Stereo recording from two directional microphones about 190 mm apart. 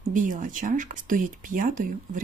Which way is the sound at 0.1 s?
45° right (ahead or behind).